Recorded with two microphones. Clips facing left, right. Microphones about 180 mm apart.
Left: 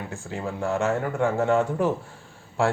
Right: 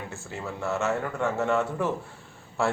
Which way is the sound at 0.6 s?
15° left (ahead or behind).